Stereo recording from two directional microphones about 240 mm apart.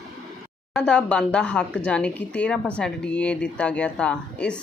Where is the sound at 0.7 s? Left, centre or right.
Centre.